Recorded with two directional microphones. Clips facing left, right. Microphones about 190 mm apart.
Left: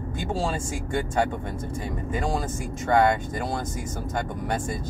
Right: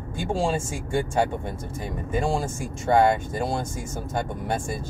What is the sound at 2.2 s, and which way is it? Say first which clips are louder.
Speech: right 1 dB; 25° right (ahead or behind).